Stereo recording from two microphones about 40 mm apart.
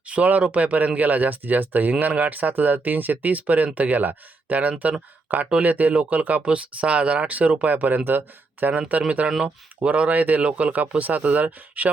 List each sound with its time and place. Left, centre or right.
0.1 s speech: right
6.4 s speech: right
8.9 s speech: right
9.4 s speech: right
10.1 s speech: right